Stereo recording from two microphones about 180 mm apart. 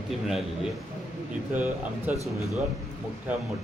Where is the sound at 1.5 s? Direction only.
10° right (ahead or behind).